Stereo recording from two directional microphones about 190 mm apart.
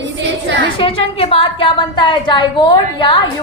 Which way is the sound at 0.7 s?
30° left (ahead or behind).